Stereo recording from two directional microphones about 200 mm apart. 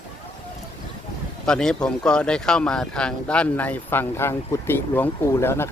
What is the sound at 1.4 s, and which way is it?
Speech, 5° left (ahead or behind).